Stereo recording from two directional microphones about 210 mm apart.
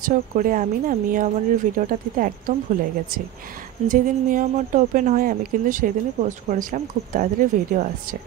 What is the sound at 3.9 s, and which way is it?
Speech, 40° right (ahead or behind).